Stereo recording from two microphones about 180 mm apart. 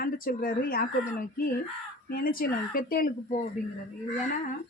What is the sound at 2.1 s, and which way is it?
Speech, 50° left (ahead or behind).